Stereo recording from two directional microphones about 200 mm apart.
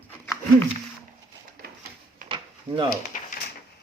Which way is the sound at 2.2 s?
25° right (ahead or behind).